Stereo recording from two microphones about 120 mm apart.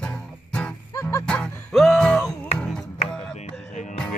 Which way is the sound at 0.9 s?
25° left (ahead or behind).